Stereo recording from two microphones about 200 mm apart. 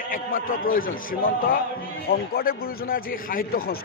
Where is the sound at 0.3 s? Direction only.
85° left.